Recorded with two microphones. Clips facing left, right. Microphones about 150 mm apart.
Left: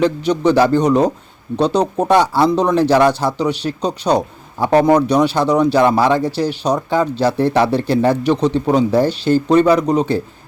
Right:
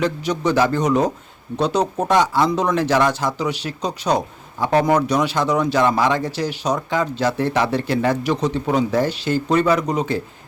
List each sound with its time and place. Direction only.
0.0 s speech: 30° left (ahead or behind)